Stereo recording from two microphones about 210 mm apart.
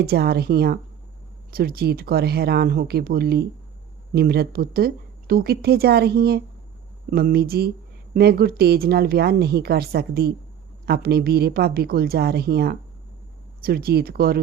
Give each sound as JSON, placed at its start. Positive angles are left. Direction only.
{"t": 0.0, "sound": "speech", "side_deg": -50}